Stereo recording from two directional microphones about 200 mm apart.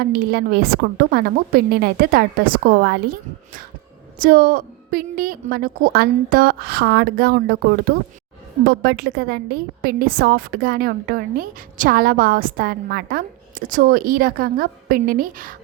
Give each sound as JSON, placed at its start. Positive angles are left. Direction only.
{"t": 0.0, "sound": "a woman's voice", "side_deg": -50}